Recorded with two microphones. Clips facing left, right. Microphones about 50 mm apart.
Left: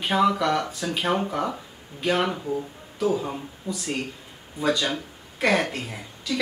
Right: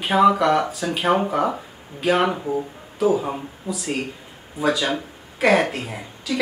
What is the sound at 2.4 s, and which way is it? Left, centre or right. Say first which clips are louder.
Speech: right 4 dB; right.